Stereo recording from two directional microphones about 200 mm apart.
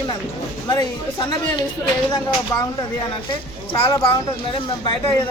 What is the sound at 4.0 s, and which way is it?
Speech, 25° left (ahead or behind).